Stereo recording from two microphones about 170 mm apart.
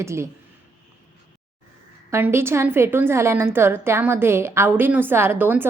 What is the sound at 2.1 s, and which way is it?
A woman's voice, 15° right (ahead or behind).